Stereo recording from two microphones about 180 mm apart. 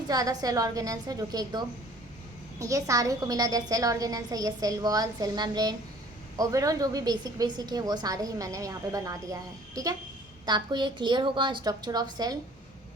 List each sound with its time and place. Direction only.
0.1 s a woman's voice: 20° right (ahead or behind)